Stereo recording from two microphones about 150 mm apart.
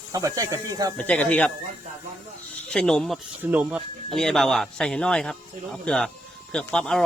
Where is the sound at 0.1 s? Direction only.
20° right (ahead or behind).